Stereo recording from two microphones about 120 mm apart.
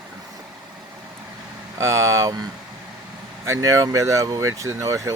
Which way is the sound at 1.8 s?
25° right (ahead or behind).